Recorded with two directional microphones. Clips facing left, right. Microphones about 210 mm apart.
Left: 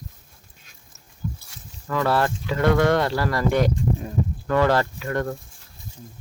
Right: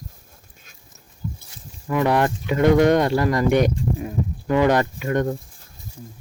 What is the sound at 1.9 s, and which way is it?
Speech, 15° right (ahead or behind).